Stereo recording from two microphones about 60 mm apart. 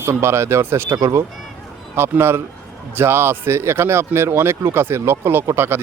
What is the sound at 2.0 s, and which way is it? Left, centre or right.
Speech, right.